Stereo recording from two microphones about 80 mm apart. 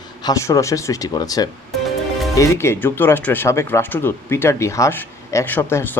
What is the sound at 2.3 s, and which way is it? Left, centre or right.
A man's voice, left.